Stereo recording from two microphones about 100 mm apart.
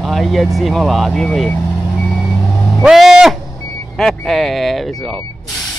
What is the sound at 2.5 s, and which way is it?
Vehicle, 5° right (ahead or behind).